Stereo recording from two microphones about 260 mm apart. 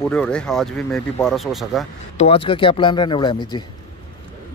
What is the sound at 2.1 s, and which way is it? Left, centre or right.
Speech, left.